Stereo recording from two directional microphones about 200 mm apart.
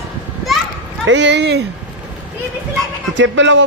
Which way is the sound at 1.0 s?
60° right (ahead or behind).